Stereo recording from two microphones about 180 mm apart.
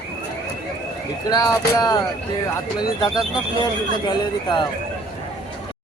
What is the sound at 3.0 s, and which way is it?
Speech, 25° left (ahead or behind).